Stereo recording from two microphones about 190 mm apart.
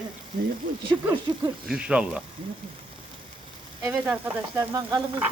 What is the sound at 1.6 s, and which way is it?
Speech, 5° right (ahead or behind).